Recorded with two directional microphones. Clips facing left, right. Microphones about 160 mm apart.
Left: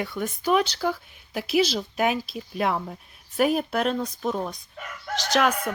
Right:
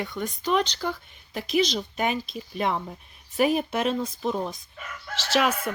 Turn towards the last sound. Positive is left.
turn(degrees=-5)  # may be behind; listen again after turning